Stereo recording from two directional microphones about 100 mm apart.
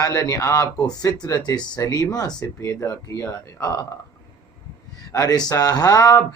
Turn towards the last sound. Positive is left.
turn(degrees=35)  # may be behind; listen again after turning